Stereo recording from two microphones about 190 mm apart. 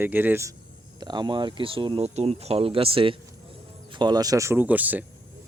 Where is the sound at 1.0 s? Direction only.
20° right (ahead or behind).